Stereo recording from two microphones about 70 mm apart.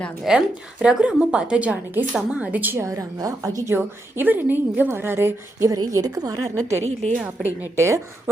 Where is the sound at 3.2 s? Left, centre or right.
Right.